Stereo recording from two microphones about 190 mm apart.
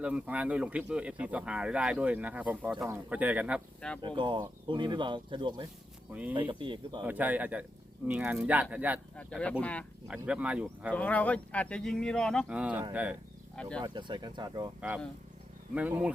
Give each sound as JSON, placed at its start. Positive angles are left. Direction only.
{"t": 0.0, "sound": "speech", "side_deg": -5}
{"t": 3.8, "sound": "speech", "side_deg": 5}
{"t": 4.0, "sound": "speech", "side_deg": -25}
{"t": 6.1, "sound": "speech", "side_deg": -10}
{"t": 6.5, "sound": "speech", "side_deg": -25}
{"t": 7.0, "sound": "speech", "side_deg": -10}
{"t": 9.1, "sound": "speech", "side_deg": 5}
{"t": 10.2, "sound": "speech", "side_deg": -5}
{"t": 10.9, "sound": "speech", "side_deg": 10}
{"t": 13.6, "sound": "speech", "side_deg": 5}
{"t": 13.8, "sound": "speech", "side_deg": -25}
{"t": 14.8, "sound": "speech", "side_deg": -5}